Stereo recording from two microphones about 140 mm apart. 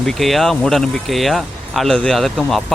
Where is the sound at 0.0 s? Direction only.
Centre (ahead or behind).